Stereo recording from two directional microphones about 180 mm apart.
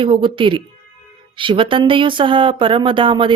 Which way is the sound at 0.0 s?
30° right (ahead or behind).